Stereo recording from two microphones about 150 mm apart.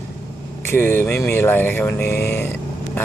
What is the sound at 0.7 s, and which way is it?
Speech, 15° left (ahead or behind).